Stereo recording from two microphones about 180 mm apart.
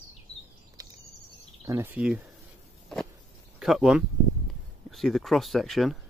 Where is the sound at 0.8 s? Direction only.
20° right (ahead or behind).